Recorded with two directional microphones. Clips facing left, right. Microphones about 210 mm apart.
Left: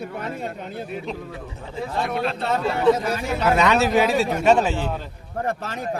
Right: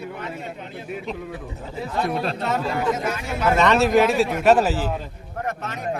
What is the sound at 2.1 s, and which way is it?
Speech, 35° right (ahead or behind).